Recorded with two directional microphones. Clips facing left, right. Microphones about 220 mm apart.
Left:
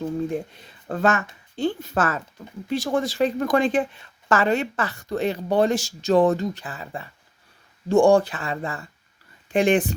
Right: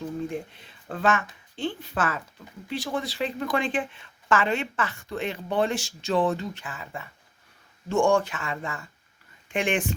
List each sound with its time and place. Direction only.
0.3 s a woman's voice: 40° left (ahead or behind)